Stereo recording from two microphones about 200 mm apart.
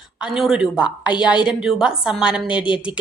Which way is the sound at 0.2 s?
Centre (ahead or behind).